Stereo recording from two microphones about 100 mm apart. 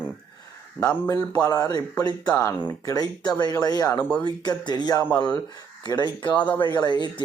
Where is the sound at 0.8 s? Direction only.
30° left (ahead or behind).